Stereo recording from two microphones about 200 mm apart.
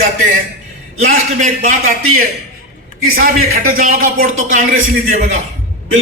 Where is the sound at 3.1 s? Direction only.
50° right (ahead or behind).